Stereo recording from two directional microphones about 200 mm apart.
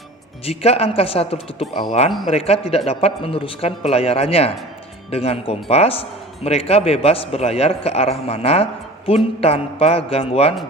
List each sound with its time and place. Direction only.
0.4 s a man's voice: 30° left (ahead or behind)
2.0 s speech: centre (ahead or behind)
2.3 s a man's voice: 30° left (ahead or behind)